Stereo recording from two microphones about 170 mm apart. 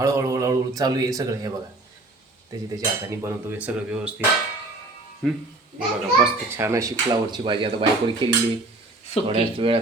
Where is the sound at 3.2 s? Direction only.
15° right (ahead or behind).